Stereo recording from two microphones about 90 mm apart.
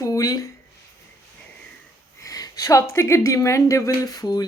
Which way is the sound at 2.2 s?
40° left (ahead or behind).